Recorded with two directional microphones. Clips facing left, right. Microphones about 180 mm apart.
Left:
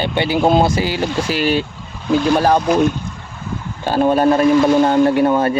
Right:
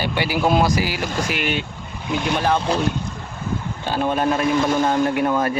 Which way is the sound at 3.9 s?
40° left (ahead or behind).